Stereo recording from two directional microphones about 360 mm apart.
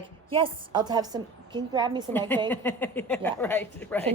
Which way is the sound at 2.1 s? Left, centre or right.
Centre.